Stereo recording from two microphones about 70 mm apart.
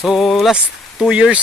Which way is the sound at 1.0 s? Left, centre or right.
Centre.